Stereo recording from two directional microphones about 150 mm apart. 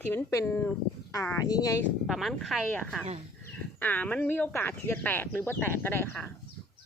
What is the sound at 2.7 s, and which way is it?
Speech, 10° left (ahead or behind).